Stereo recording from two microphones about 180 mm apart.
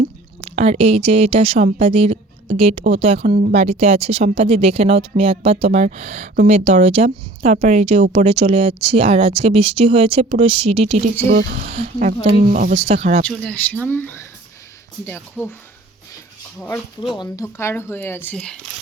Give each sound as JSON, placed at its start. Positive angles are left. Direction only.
{"t": 0.4, "sound": "speech", "side_deg": -35}
{"t": 13.2, "sound": "speech", "side_deg": 5}
{"t": 16.6, "sound": "speech", "side_deg": 10}